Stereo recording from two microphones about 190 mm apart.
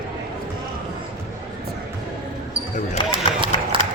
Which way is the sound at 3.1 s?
25° right (ahead or behind).